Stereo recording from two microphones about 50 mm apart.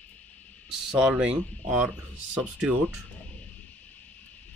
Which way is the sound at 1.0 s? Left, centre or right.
Right.